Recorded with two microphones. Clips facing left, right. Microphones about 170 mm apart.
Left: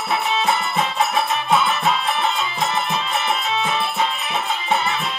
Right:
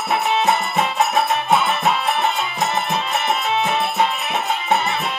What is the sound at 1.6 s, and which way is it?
Music, 60° right (ahead or behind).